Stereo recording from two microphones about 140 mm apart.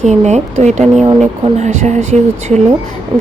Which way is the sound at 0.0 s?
55° right (ahead or behind).